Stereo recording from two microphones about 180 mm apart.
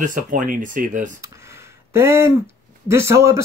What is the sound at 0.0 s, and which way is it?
Speech, 45° right (ahead or behind).